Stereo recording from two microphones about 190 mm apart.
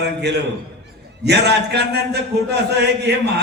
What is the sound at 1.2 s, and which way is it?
A man's voice, 60° right (ahead or behind).